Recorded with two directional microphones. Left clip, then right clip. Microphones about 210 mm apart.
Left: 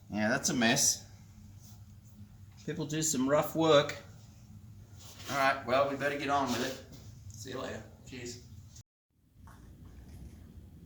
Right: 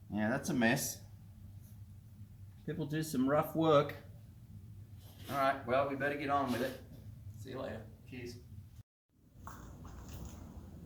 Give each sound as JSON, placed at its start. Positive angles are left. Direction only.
{"t": 0.1, "sound": "speech", "side_deg": 5}
{"t": 2.6, "sound": "speech", "side_deg": 15}
{"t": 5.3, "sound": "speech", "side_deg": 5}
{"t": 7.4, "sound": "speech", "side_deg": 0}